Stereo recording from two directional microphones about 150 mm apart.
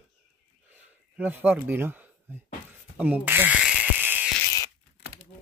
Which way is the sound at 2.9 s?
10° right (ahead or behind).